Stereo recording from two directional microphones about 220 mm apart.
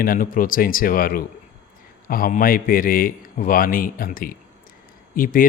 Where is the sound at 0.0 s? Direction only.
40° left (ahead or behind).